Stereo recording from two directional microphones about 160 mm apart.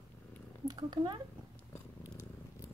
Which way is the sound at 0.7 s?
30° right (ahead or behind).